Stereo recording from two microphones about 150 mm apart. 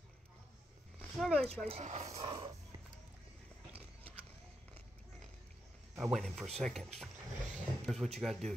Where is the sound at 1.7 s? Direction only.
50° right (ahead or behind).